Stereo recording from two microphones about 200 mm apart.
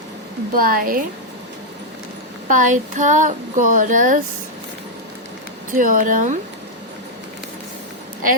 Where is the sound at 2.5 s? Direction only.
40° right (ahead or behind).